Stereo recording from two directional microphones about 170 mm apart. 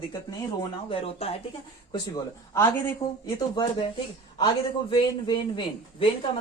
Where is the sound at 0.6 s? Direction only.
35° left (ahead or behind).